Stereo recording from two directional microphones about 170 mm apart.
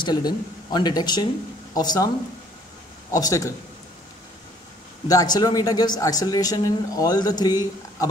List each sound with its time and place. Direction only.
0.0 s speech: 25° left (ahead or behind)
3.1 s speech: 20° left (ahead or behind)
5.0 s speech: 20° left (ahead or behind)